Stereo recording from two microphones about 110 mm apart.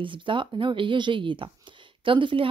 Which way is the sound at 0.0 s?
50° right (ahead or behind).